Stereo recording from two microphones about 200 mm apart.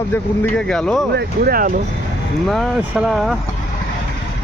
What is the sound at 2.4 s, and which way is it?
Speech, centre (ahead or behind).